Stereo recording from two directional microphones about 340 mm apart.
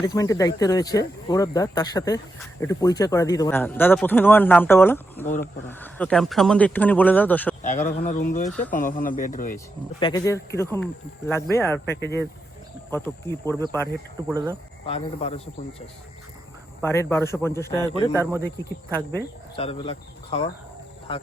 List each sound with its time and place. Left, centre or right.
0.0 s speech: centre
7.6 s speech: left
10.0 s speech: centre
13.8 s speech: centre
14.8 s speech: centre
16.8 s speech: centre